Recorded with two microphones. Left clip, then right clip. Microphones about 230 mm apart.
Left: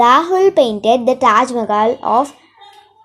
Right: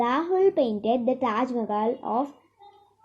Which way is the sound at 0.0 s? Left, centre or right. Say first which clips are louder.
Left 12 dB; left.